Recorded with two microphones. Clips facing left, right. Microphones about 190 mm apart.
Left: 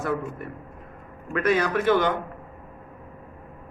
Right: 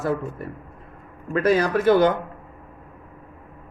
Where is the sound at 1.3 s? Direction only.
35° right (ahead or behind).